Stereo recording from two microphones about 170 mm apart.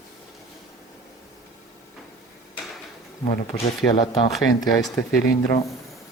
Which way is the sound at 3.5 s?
30° left (ahead or behind).